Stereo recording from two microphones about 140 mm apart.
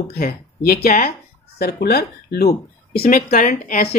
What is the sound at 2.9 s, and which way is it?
Speech, 90° left.